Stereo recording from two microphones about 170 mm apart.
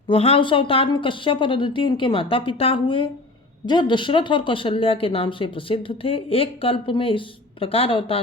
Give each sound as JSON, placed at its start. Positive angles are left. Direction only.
{"t": 0.1, "sound": "speech", "side_deg": 35}